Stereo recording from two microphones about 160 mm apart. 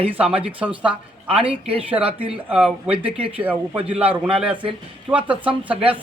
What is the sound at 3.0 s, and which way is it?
Speech, 35° right (ahead or behind).